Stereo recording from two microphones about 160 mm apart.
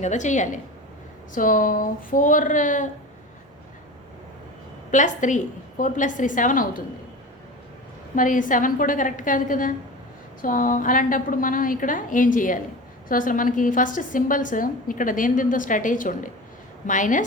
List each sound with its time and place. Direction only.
0.0 s a woman's voice: 50° left (ahead or behind)
4.9 s a woman's voice: 50° left (ahead or behind)
8.1 s a woman's voice: 55° left (ahead or behind)